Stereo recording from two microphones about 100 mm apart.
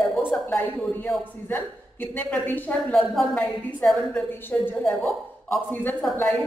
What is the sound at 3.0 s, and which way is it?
A woman's voice, centre (ahead or behind).